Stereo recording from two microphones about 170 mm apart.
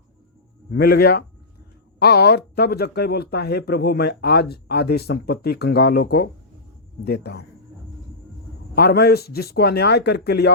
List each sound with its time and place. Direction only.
0.7 s speech: 65° left (ahead or behind)
8.7 s speech: 65° left (ahead or behind)